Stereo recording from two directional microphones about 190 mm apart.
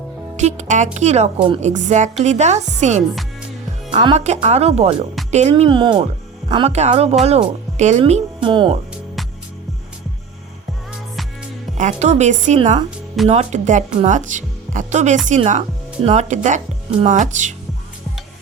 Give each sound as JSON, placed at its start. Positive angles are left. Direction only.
{"t": 0.3, "sound": "a woman's voice", "side_deg": -35}
{"t": 1.7, "sound": "a woman's voice", "side_deg": -40}
{"t": 11.8, "sound": "a woman's voice", "side_deg": -40}